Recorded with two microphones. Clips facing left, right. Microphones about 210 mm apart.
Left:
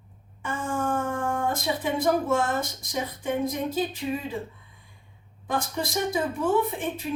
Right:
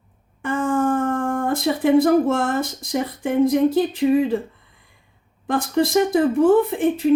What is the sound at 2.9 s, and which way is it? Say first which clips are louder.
Speech: right 8 dB; 65° right (ahead or behind).